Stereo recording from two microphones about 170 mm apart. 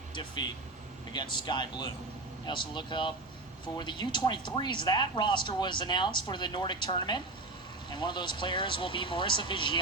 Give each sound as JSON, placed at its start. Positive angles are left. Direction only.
{"t": 0.1, "sound": "speech", "side_deg": 25}